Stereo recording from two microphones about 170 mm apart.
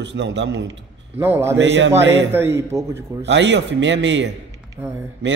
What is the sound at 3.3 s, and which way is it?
Speech, 90° right.